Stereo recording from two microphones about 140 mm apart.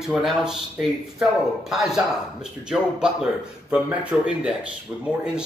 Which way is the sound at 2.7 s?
5° right (ahead or behind).